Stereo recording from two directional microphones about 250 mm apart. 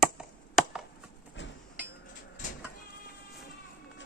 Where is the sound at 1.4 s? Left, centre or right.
Left.